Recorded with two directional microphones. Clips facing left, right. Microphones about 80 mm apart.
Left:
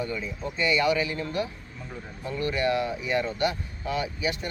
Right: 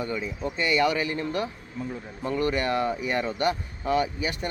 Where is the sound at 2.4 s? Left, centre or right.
Right.